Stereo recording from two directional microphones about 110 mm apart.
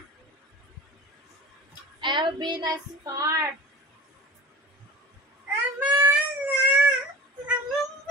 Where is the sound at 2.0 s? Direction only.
45° right (ahead or behind).